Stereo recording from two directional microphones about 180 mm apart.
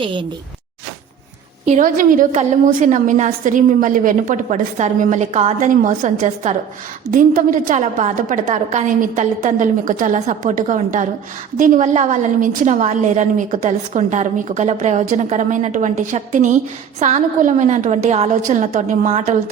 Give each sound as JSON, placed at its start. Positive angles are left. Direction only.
{"t": 0.0, "sound": "speech", "side_deg": -25}
{"t": 1.6, "sound": "a woman's voice", "side_deg": -45}